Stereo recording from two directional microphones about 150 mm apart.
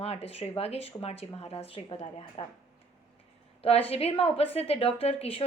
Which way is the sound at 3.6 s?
40° left (ahead or behind).